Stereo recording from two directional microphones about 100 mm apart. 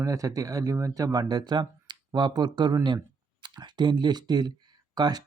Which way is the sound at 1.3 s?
45° right (ahead or behind).